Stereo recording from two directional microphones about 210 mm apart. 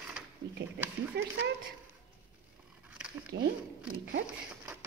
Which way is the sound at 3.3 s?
50° right (ahead or behind).